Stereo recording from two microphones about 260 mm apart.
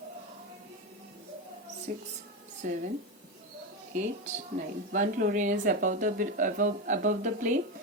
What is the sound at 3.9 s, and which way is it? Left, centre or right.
Speech, right.